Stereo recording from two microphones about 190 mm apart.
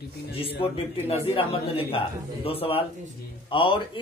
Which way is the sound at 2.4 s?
30° left (ahead or behind).